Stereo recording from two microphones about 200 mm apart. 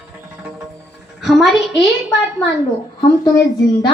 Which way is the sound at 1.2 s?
Centre (ahead or behind).